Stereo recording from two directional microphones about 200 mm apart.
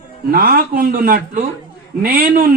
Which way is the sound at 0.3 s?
45° right (ahead or behind).